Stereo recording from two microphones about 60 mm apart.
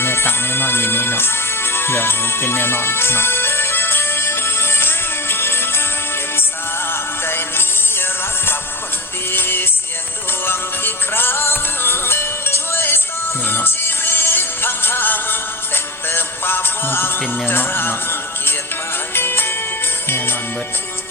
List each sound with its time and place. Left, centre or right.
0.0 s music: left
6.9 s music: left